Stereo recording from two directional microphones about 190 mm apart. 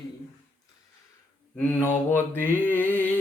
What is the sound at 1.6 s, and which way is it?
Mantra, 10° left (ahead or behind).